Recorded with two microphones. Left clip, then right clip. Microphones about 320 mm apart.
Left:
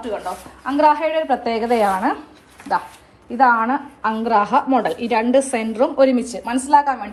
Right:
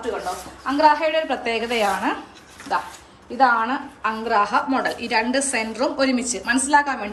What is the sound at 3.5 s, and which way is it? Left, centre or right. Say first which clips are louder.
A woman's voice: left 4 dB; centre.